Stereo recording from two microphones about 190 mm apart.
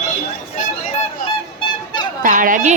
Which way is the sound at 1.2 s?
25° left (ahead or behind).